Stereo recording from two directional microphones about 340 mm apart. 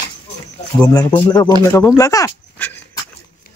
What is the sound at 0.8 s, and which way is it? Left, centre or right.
Speech, centre.